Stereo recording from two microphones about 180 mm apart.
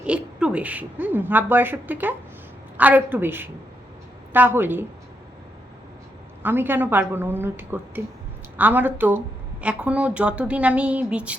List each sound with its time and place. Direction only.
0.0 s a woman's voice: 5° right (ahead or behind)
6.4 s a woman's voice: 10° right (ahead or behind)